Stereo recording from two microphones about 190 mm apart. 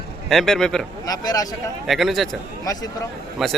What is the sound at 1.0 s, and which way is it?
Speech, 20° left (ahead or behind).